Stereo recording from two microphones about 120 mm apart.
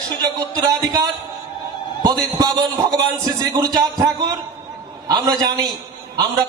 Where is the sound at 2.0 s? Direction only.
35° right (ahead or behind).